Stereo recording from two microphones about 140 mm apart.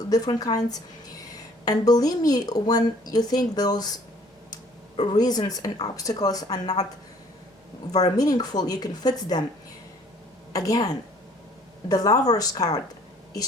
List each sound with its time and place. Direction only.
0.1 s a woman's voice: 30° left (ahead or behind)
8.1 s a woman's voice: 25° left (ahead or behind)
10.5 s a woman's voice: 25° left (ahead or behind)